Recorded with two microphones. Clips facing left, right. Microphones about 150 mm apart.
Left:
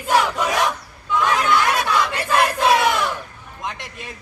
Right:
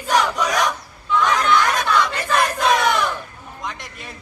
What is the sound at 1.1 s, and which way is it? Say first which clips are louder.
Chatter: right 1 dB; 10° left (ahead or behind).